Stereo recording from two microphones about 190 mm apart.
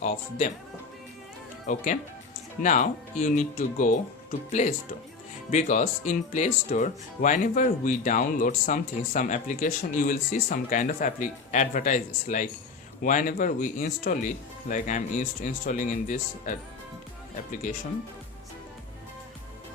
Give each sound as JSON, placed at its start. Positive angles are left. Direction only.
{"t": 0.0, "sound": "speech", "side_deg": 40}
{"t": 1.6, "sound": "speech", "side_deg": 40}
{"t": 5.5, "sound": "speech", "side_deg": 40}